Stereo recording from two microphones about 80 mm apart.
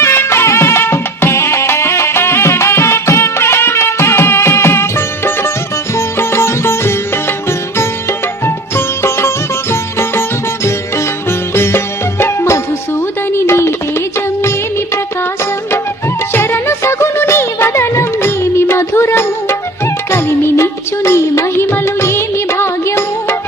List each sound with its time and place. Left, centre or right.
0.0 s music: left
8.4 s sitar: left
12.2 s music: left
16.3 s music: left